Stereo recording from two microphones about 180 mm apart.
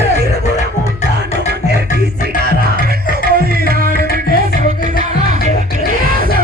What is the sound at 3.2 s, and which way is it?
Music, 55° right (ahead or behind).